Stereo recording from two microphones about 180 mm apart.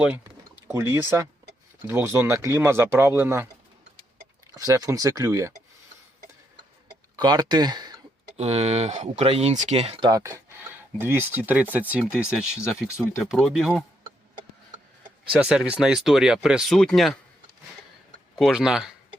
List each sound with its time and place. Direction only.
0.7 s speech: 15° right (ahead or behind)
4.5 s speech: 20° right (ahead or behind)
7.2 s speech: 25° right (ahead or behind)
8.4 s speech: 35° right (ahead or behind)
10.1 s speech: 20° right (ahead or behind); by 13.8 s centre (ahead or behind)
15.3 s speech: 5° right (ahead or behind)
18.3 s speech: centre (ahead or behind)